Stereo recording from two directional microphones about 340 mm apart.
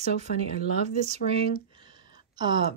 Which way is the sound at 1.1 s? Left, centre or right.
Centre.